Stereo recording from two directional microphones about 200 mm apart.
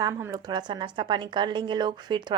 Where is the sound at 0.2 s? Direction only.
20° right (ahead or behind).